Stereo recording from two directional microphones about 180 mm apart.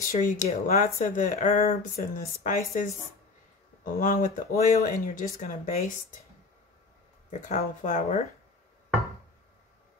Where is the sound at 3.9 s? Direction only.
50° left (ahead or behind).